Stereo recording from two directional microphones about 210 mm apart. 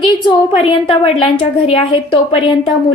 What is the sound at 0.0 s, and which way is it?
A woman's voice, 25° left (ahead or behind).